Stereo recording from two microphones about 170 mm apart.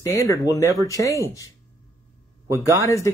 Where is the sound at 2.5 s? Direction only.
15° right (ahead or behind).